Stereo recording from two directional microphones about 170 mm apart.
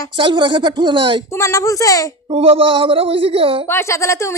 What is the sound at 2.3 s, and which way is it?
Speech, 35° right (ahead or behind).